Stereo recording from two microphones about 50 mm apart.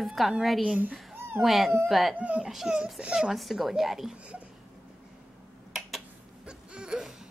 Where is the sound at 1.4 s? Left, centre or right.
Centre.